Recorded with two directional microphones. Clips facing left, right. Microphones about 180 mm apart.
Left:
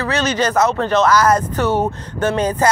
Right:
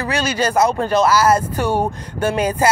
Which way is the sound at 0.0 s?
10° right (ahead or behind).